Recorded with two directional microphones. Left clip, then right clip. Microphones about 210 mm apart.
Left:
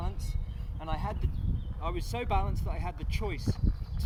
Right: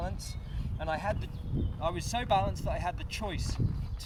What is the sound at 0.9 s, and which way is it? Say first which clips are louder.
Speech: right 4 dB; 35° right (ahead or behind).